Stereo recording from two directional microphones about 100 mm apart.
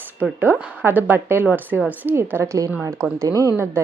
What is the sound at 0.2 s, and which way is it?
Speech, 15° right (ahead or behind).